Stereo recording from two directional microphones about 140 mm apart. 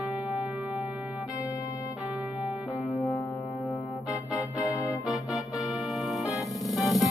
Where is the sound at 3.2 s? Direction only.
15° left (ahead or behind).